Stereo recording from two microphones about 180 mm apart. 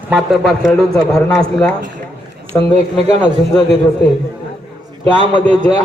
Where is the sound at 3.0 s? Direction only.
25° left (ahead or behind).